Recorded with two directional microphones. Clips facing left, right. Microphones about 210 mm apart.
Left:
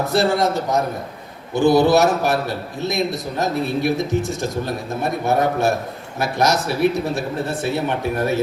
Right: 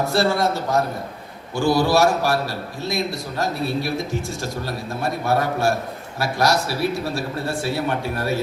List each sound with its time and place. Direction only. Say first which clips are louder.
0.0 s speech: left 2 dB; 20° left (ahead or behind)